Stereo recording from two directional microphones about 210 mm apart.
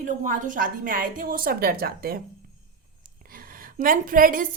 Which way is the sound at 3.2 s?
45° right (ahead or behind).